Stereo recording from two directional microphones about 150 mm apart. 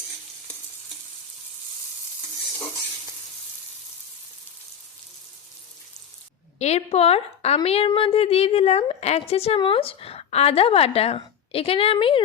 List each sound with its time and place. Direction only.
6.6 s a woman's voice: 45° left (ahead or behind)